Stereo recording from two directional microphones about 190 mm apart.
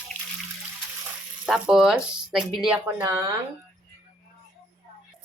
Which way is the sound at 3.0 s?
15° right (ahead or behind).